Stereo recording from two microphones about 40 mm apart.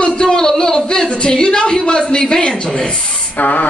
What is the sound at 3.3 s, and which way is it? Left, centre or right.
Spray, left.